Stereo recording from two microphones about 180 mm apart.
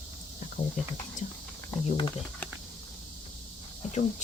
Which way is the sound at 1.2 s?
45° left (ahead or behind).